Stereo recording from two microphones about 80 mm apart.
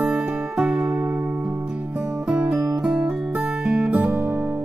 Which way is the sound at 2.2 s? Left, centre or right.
Centre.